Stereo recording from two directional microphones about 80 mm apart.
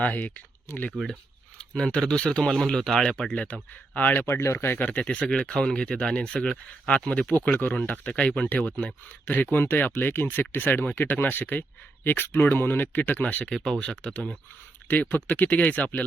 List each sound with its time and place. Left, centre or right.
0.0 s speech: left
1.5 s speech: centre; by 4.9 s left
4.9 s speech: centre